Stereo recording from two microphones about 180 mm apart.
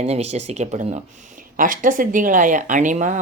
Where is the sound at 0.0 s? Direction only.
35° right (ahead or behind).